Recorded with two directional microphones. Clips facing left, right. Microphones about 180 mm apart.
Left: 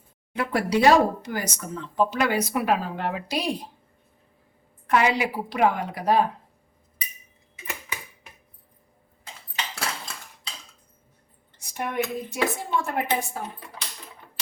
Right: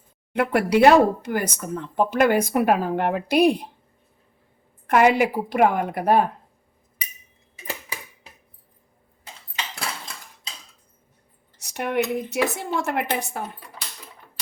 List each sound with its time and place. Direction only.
0.3 s speech: 60° right (ahead or behind)
4.9 s a woman's voice: 50° right (ahead or behind)
7.7 s a sound: 30° right (ahead or behind)
11.5 s a woman's voice: 75° right (ahead or behind)